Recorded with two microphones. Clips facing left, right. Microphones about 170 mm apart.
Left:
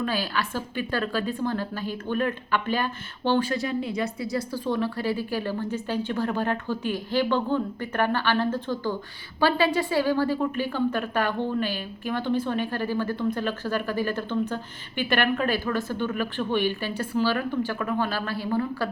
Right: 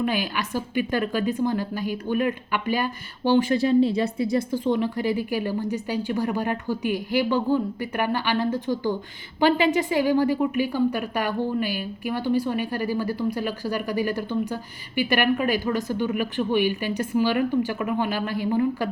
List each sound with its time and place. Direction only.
0.0 s a woman's voice: 15° right (ahead or behind)